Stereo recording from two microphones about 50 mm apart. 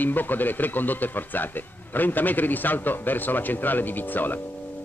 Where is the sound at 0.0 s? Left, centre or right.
Left.